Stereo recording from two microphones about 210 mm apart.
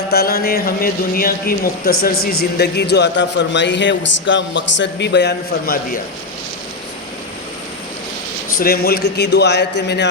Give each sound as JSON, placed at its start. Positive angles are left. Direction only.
{"t": 0.1, "sound": "a man's voice", "side_deg": 50}
{"t": 8.5, "sound": "a man's voice", "side_deg": 45}